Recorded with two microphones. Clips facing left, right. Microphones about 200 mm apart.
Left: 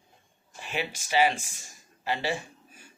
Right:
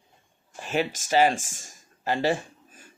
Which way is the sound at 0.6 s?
45° right (ahead or behind).